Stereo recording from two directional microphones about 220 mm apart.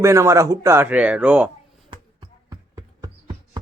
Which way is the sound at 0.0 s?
15° right (ahead or behind).